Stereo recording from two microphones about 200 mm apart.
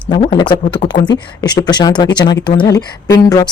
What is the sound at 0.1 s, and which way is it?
Speech, 25° left (ahead or behind).